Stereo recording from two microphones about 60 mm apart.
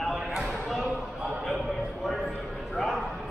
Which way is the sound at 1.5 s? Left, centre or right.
Centre.